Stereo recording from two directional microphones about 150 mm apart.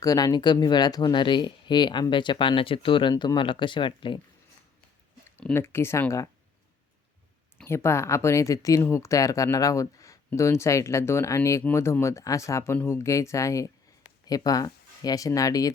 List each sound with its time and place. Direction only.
0.0 s speech: 25° left (ahead or behind)
5.4 s speech: 15° left (ahead or behind)
7.6 s speech: 15° left (ahead or behind)